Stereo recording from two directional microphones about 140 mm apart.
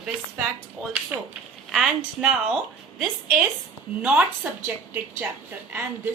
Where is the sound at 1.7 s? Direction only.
5° right (ahead or behind).